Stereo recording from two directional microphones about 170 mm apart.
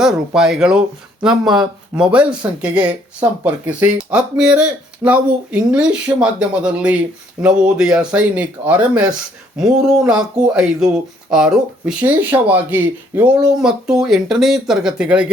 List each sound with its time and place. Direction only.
0.0 s speech: centre (ahead or behind)